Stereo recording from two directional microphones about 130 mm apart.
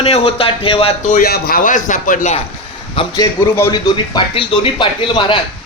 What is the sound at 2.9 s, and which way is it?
Speech, 30° left (ahead or behind).